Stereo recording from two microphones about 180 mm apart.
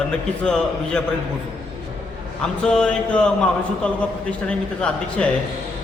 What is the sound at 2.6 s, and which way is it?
A man's voice, 5° left (ahead or behind).